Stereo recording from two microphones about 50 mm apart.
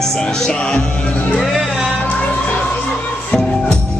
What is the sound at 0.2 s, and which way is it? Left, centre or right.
Speech, centre.